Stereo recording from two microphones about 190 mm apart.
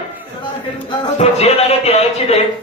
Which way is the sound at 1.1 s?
35° left (ahead or behind).